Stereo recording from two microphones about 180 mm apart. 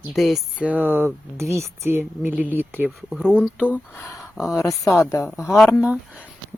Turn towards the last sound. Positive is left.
turn(degrees=-5)  # may be behind; listen again after turning